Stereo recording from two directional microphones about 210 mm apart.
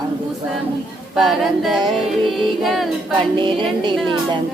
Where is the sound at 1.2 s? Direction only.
Centre (ahead or behind).